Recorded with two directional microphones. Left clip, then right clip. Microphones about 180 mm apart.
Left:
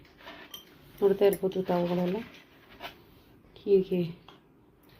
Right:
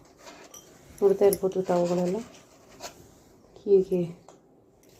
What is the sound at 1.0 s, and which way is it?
Speech, centre (ahead or behind).